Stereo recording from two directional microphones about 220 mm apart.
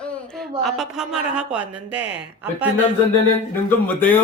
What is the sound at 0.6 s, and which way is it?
Speech, centre (ahead or behind).